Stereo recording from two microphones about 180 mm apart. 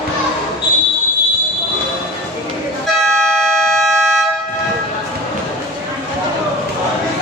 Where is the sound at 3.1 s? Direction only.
5° left (ahead or behind).